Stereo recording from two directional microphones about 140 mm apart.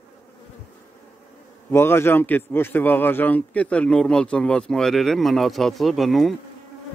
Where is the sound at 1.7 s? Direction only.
15° left (ahead or behind).